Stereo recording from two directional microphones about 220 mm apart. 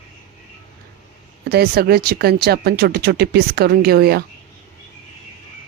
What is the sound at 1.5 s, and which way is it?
Speech, 45° right (ahead or behind).